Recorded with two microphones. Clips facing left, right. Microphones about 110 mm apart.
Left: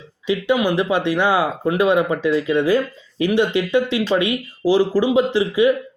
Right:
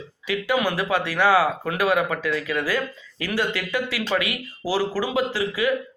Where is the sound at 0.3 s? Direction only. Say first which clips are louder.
Left 5 dB; 20° left (ahead or behind).